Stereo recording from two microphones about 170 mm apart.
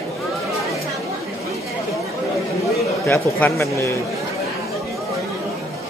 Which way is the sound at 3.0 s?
10° left (ahead or behind).